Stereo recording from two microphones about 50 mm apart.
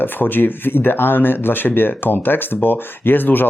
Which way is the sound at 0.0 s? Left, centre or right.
Left.